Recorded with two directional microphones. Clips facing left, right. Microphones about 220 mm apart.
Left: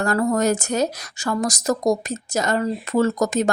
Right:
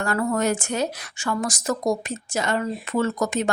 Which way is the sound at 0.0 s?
40° left (ahead or behind).